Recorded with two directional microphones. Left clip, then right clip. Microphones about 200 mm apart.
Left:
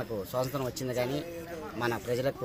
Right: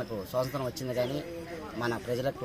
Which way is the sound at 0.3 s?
15° left (ahead or behind).